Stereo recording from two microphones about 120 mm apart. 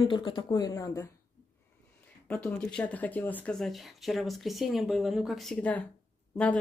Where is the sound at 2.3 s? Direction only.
10° left (ahead or behind).